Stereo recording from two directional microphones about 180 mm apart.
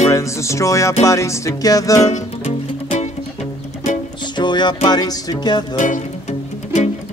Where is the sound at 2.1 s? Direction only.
40° left (ahead or behind).